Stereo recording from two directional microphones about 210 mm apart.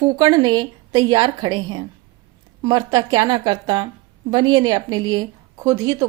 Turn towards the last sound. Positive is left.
turn(degrees=-15)  # may be behind; listen again after turning